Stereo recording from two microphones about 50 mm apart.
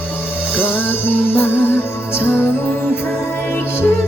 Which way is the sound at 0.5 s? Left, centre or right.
Left.